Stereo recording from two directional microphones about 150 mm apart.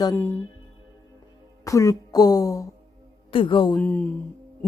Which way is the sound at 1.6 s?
20° left (ahead or behind).